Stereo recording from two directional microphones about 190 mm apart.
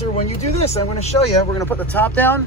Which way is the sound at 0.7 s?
35° left (ahead or behind).